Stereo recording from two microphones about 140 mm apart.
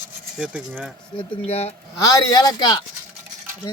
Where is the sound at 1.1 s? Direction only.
45° left (ahead or behind).